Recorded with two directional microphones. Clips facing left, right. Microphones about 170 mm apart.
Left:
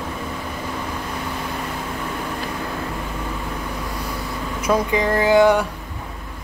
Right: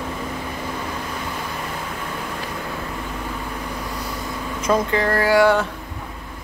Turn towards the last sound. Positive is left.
turn(degrees=20)  # may be behind; listen again after turning